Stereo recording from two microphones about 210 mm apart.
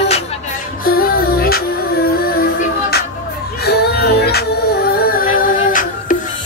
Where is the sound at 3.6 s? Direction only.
50° left (ahead or behind).